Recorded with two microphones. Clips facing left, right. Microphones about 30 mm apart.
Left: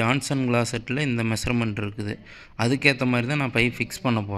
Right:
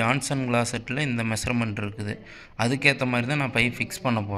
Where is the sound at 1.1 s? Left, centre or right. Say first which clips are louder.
Left 2 dB; left.